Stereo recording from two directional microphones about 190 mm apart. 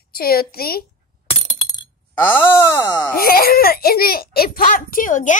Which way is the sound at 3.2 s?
50° left (ahead or behind).